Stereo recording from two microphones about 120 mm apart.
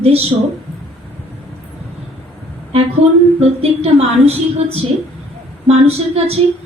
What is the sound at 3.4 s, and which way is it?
A woman's voice, 60° right (ahead or behind).